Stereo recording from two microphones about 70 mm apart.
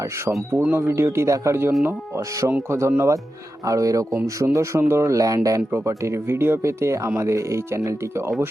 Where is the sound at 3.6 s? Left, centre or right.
Right.